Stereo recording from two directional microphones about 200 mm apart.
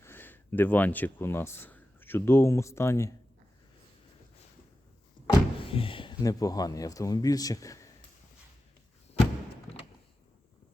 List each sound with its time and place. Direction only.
0.0 s speech: 10° left (ahead or behind)
5.2 s speech: 25° left (ahead or behind)